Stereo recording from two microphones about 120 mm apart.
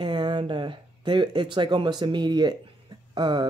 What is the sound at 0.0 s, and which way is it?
Speech, 40° right (ahead or behind).